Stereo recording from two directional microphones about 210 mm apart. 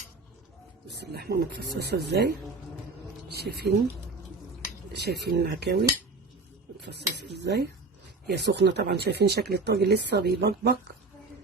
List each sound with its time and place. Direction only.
0.9 s speech: 50° right (ahead or behind)
4.9 s speech: 50° right (ahead or behind)
6.8 s speech: 50° right (ahead or behind)